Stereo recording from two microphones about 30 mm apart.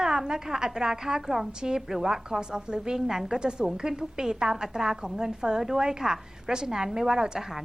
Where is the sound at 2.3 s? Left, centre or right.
Right.